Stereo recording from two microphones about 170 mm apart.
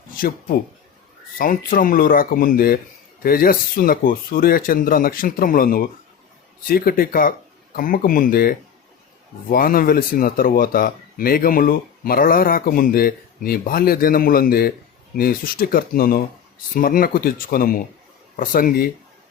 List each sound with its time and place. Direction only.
0.2 s speech: 55° left (ahead or behind)